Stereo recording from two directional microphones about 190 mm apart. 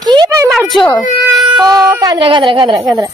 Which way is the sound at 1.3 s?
5° right (ahead or behind).